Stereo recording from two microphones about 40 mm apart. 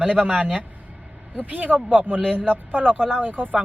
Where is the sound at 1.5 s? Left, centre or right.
Right.